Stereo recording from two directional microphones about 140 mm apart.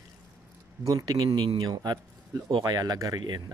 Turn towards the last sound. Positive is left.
turn(degrees=-30)  # may be behind; listen again after turning